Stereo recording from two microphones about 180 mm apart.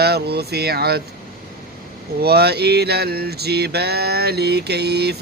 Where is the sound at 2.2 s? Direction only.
65° right (ahead or behind).